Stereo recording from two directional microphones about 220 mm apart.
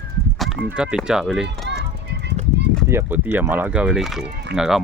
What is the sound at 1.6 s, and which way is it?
Children playing, 50° right (ahead or behind).